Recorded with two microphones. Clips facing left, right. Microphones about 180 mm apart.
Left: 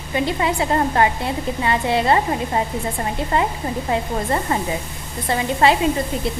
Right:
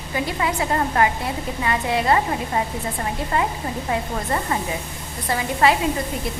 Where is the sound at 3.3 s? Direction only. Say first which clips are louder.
Left 2 dB; 30° left (ahead or behind).